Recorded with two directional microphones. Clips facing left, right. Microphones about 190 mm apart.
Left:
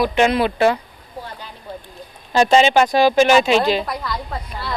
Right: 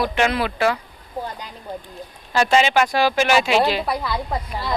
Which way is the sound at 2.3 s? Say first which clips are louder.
Left 4 dB; 25° left (ahead or behind).